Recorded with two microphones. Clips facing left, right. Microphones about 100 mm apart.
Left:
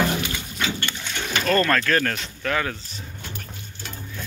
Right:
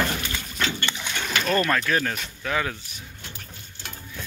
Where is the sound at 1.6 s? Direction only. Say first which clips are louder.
Left 2 dB; 15° right (ahead or behind).